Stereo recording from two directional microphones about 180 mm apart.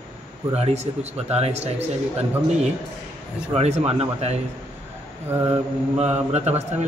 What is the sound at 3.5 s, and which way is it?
Speech, 35° right (ahead or behind).